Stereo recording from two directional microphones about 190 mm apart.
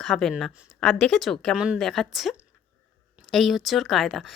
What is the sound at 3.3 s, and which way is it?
Speech, centre (ahead or behind).